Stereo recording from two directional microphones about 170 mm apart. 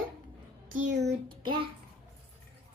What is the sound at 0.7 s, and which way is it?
Speech, 45° right (ahead or behind).